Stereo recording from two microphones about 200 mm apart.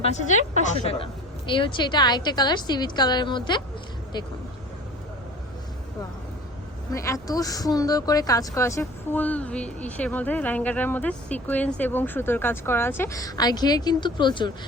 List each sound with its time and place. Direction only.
0.0 s a woman's voice: 35° left (ahead or behind)
6.9 s speech: 15° left (ahead or behind)